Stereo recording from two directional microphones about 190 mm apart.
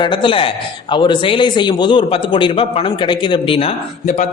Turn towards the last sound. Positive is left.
turn(degrees=35)  # may be behind; listen again after turning